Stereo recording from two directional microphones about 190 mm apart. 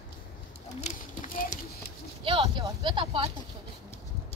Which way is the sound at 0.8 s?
40° left (ahead or behind).